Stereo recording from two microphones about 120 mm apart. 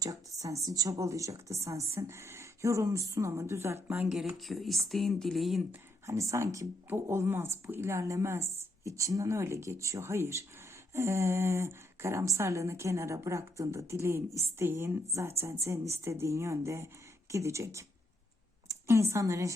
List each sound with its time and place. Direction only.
0.0 s a woman's voice: 30° right (ahead or behind)
4.1 s speech: centre (ahead or behind)
6.1 s speech: 25° right (ahead or behind)
18.7 s a sound: 25° right (ahead or behind)
19.1 s speech: 25° right (ahead or behind)